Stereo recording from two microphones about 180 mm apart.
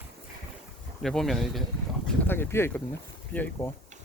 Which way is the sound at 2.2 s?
10° left (ahead or behind).